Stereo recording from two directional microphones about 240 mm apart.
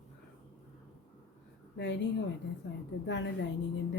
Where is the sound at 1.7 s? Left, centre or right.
Left.